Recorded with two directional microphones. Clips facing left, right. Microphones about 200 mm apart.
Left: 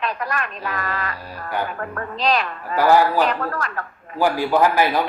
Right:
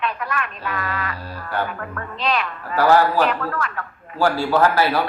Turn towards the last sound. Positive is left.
turn(degrees=15)  # may be behind; listen again after turning